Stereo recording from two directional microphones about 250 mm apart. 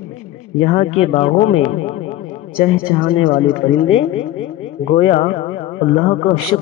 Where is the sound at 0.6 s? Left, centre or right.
Left.